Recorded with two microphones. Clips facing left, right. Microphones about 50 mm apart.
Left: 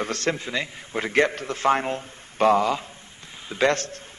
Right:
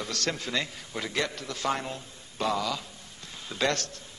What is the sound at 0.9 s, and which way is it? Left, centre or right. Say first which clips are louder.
A man's voice: left 9 dB; left.